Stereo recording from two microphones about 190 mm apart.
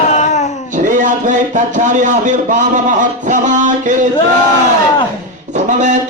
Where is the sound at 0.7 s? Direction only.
45° right (ahead or behind).